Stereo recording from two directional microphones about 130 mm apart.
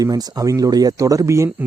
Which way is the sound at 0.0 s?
30° right (ahead or behind).